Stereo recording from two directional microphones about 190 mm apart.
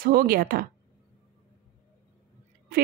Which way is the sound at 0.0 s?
50° right (ahead or behind).